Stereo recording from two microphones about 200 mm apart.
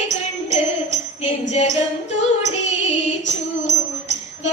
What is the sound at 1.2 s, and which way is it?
Music, 35° left (ahead or behind).